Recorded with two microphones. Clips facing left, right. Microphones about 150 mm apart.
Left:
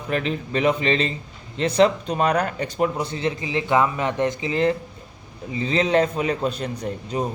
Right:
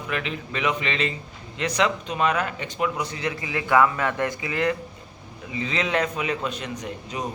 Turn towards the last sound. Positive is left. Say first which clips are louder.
# left 5 dB
turn(degrees=35)  # may be behind; listen again after turning